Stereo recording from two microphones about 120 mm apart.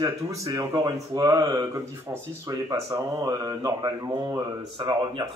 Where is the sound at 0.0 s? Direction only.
30° right (ahead or behind).